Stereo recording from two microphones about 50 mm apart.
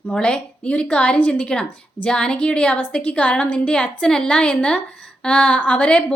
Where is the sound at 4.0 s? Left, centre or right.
Centre.